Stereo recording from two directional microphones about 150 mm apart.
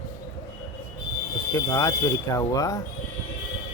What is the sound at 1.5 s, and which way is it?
Speech, 20° left (ahead or behind).